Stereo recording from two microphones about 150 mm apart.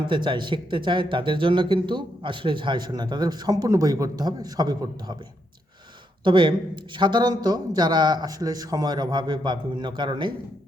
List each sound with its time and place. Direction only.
0.1 s a man's voice: 30° right (ahead or behind)
6.2 s a man's voice: 30° right (ahead or behind)